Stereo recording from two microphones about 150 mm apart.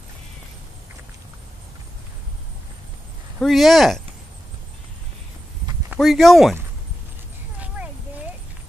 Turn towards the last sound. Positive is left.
turn(degrees=-10)  # may be behind; listen again after turning